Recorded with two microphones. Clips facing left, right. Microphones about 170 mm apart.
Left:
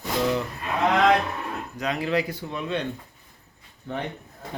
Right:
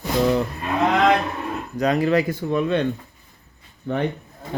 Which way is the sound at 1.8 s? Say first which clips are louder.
Right 7 dB; 45° right (ahead or behind).